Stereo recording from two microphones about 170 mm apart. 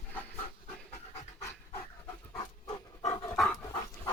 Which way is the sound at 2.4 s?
20° left (ahead or behind).